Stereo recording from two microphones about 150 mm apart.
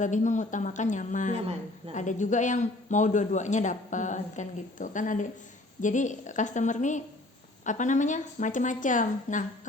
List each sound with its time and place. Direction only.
0.0 s a man's voice: 55° left (ahead or behind)